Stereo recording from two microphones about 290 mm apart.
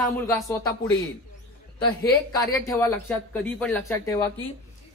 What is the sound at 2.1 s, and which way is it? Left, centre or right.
Speech, centre.